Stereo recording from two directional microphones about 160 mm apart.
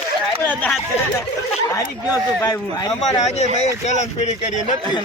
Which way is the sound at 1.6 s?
20° left (ahead or behind).